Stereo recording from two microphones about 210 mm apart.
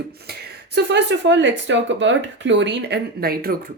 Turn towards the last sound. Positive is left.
turn(degrees=-45)  # may be behind; listen again after turning